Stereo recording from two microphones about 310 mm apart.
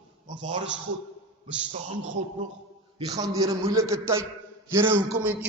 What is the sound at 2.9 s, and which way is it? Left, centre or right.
A man's voice, centre.